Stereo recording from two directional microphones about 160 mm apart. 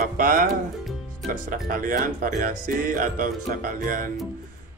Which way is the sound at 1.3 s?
60° right (ahead or behind).